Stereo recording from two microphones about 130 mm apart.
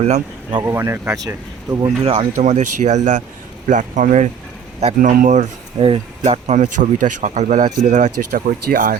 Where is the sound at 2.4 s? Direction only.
70° right (ahead or behind).